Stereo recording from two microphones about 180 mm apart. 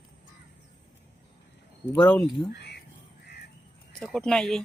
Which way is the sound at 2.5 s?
70° left (ahead or behind).